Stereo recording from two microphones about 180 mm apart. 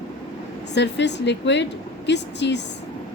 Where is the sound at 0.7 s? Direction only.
75° left (ahead or behind).